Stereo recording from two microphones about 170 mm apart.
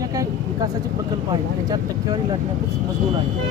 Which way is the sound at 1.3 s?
25° right (ahead or behind).